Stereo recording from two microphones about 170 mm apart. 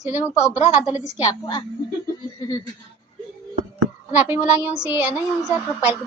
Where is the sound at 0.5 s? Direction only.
40° left (ahead or behind).